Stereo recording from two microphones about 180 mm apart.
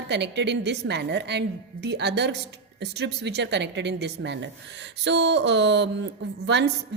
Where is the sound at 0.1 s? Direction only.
70° right (ahead or behind).